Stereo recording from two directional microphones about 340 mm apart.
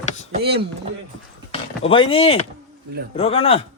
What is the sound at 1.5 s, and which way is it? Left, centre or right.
Speech, centre.